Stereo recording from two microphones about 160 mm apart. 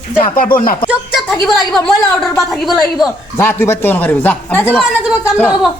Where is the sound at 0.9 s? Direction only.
Centre (ahead or behind).